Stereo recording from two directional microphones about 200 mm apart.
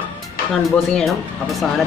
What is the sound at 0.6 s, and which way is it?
Speech, centre (ahead or behind).